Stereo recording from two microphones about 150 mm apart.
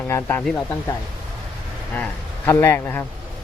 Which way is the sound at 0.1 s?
15° left (ahead or behind).